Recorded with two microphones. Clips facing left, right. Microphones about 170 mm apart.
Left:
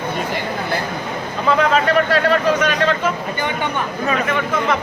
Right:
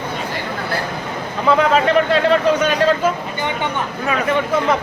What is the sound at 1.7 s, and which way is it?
Speech, 25° right (ahead or behind).